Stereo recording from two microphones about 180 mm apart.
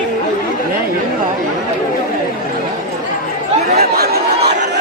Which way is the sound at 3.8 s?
60° right (ahead or behind).